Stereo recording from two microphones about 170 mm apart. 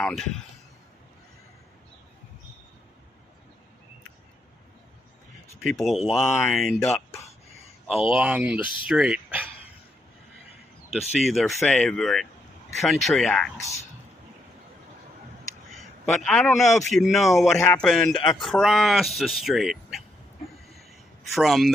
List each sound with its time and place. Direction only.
0.0 s speech: centre (ahead or behind)
5.6 s speech: centre (ahead or behind)
6.2 s speech: 10° left (ahead or behind)
6.6 s speech: centre (ahead or behind)
8.1 s speech: 10° right (ahead or behind)
11.1 s speech: centre (ahead or behind)
15.7 s a man's voice: centre (ahead or behind)
17.6 s speech: 15° left (ahead or behind)
17.8 s speech: centre (ahead or behind)
18.2 s speech: 25° left (ahead or behind)
18.4 s speech: centre (ahead or behind)
21.3 s speech: centre (ahead or behind)